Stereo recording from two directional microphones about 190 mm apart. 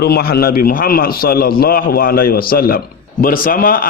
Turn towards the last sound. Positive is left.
turn(degrees=50)  # may be behind; listen again after turning